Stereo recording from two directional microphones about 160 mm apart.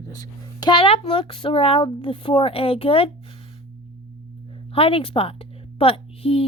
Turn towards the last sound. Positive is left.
turn(degrees=35)  # may be behind; listen again after turning